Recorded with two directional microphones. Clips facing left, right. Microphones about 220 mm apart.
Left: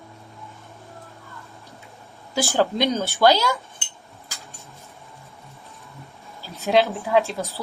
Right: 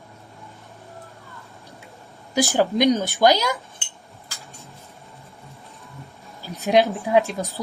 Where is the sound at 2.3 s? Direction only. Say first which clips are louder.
Right 2 dB; 15° right (ahead or behind).